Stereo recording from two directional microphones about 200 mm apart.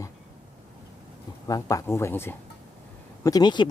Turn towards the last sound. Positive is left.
turn(degrees=20)  # may be behind; listen again after turning